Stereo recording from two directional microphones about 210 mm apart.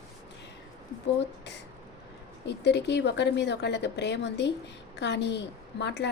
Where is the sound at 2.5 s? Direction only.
55° left (ahead or behind).